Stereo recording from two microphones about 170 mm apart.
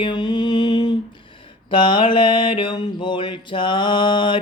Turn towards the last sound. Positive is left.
turn(degrees=30)  # may be behind; listen again after turning